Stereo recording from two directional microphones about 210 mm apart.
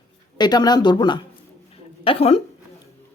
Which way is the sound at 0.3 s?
20° left (ahead or behind).